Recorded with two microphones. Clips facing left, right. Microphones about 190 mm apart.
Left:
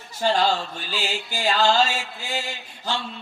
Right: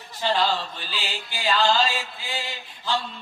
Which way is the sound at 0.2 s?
45° left (ahead or behind).